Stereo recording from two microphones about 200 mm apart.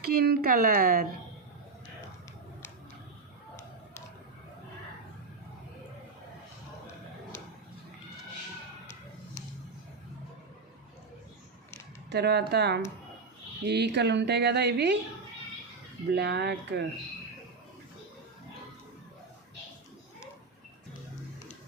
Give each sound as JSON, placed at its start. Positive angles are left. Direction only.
{"t": 0.0, "sound": "a woman's voice", "side_deg": -50}
{"t": 12.1, "sound": "speech", "side_deg": -55}
{"t": 16.1, "sound": "speech", "side_deg": -55}